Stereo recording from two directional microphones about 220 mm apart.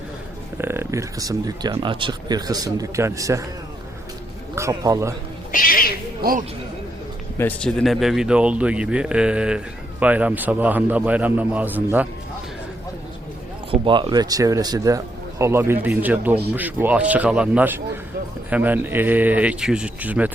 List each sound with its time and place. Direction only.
0.6 s speech: 10° right (ahead or behind)
4.5 s speech: 15° right (ahead or behind)
5.5 s cat: 40° left (ahead or behind)
7.3 s a man's voice: 5° left (ahead or behind)
13.7 s speech: 20° right (ahead or behind)